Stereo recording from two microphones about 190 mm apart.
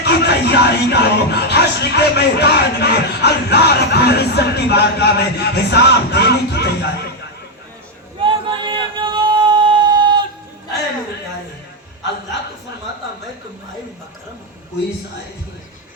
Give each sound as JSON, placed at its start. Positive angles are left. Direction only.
{"t": 0.0, "sound": "music", "side_deg": 60}
{"t": 8.2, "sound": "music", "side_deg": -25}